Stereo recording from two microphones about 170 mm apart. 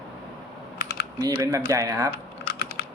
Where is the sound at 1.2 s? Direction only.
20° right (ahead or behind).